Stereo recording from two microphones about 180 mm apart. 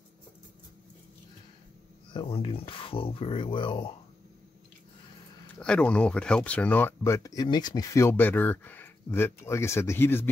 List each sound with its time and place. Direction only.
2.1 s speech: 30° left (ahead or behind)
5.6 s speech: 5° left (ahead or behind)